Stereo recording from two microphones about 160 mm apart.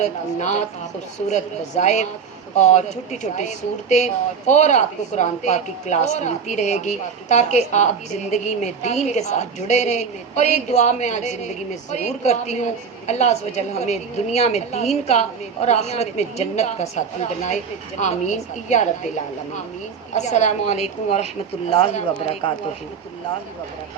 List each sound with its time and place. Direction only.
0.0 s speech: 45° left (ahead or behind)